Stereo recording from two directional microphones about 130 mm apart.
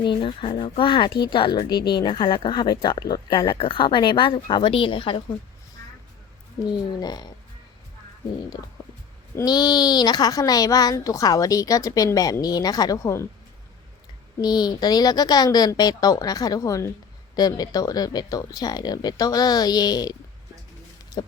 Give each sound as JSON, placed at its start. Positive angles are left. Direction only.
{"t": 0.0, "sound": "speech", "side_deg": 40}
{"t": 7.0, "sound": "speech", "side_deg": 30}
{"t": 8.5, "sound": "a woman's voice", "side_deg": 30}
{"t": 14.4, "sound": "a woman's voice", "side_deg": 30}